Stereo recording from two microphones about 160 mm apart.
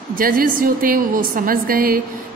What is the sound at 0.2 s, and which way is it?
A woman's voice, 60° right (ahead or behind).